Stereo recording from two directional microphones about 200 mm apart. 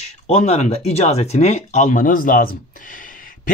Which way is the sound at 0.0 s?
35° left (ahead or behind).